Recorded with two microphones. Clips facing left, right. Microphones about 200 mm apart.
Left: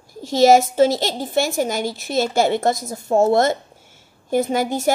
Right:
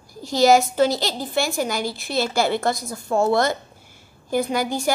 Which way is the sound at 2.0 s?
45° left (ahead or behind).